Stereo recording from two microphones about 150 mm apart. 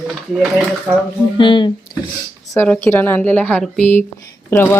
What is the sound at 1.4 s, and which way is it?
Speech, 35° left (ahead or behind).